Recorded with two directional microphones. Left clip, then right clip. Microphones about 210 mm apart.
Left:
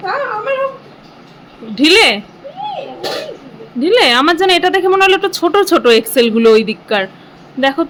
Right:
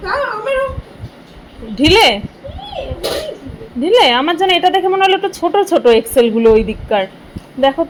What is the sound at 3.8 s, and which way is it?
A woman's voice, 10° left (ahead or behind).